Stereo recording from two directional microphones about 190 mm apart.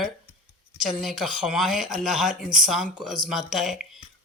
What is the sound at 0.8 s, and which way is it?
Speech, centre (ahead or behind).